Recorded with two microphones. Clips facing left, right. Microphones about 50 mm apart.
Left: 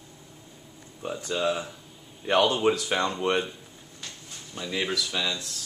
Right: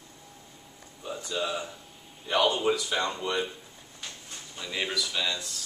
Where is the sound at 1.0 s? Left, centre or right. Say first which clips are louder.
Left 3 dB; left.